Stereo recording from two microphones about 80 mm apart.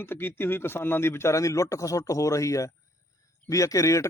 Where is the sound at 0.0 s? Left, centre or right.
Left.